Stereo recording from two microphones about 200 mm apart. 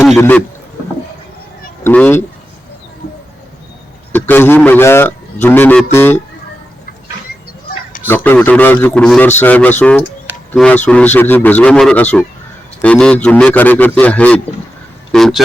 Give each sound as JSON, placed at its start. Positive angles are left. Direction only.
{"t": 0.2, "sound": "a man's voice", "side_deg": 10}
{"t": 1.8, "sound": "a man's voice", "side_deg": 10}
{"t": 3.0, "sound": "a sound", "side_deg": 35}
{"t": 4.1, "sound": "a man's voice", "side_deg": 10}
{"t": 8.0, "sound": "a man's voice", "side_deg": 10}